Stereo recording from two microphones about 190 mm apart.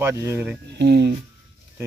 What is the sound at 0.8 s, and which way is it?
Speech, 65° right (ahead or behind).